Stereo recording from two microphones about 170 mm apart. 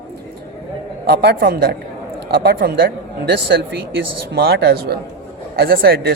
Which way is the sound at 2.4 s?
70° right (ahead or behind).